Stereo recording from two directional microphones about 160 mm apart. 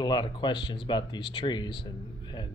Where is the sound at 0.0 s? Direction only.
25° left (ahead or behind).